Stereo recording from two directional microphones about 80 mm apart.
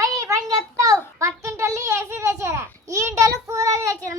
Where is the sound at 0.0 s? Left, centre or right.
Right.